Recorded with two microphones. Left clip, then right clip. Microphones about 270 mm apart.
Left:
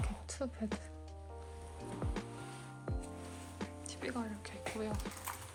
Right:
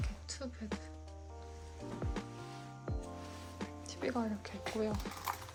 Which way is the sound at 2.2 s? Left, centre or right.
Centre.